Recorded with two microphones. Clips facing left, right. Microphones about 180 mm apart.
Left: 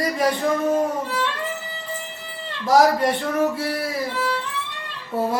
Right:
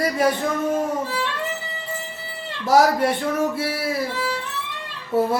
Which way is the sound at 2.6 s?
10° right (ahead or behind).